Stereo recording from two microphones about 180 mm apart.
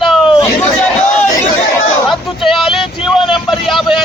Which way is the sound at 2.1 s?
Centre (ahead or behind).